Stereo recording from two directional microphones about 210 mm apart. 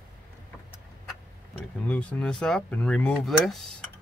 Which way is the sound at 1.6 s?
5° left (ahead or behind).